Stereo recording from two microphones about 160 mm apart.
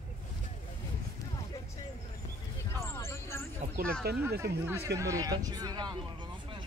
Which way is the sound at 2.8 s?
15° left (ahead or behind).